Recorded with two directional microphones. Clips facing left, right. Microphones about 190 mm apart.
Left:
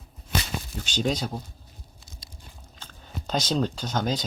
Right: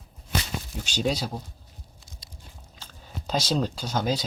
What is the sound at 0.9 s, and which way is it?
Speech, 5° right (ahead or behind).